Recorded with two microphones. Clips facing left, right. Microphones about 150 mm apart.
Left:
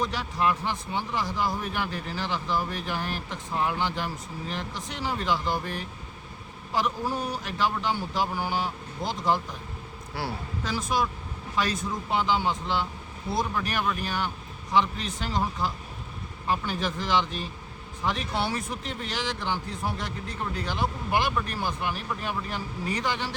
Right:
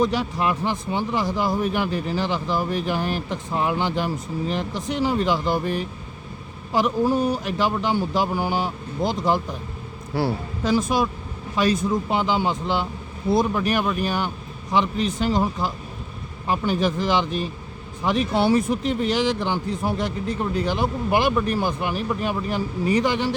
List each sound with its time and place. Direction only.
0.0 s speech: 15° right (ahead or behind)
10.6 s speech: 15° right (ahead or behind)